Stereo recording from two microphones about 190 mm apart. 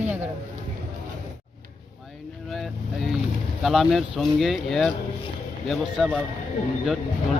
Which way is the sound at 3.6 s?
Centre (ahead or behind).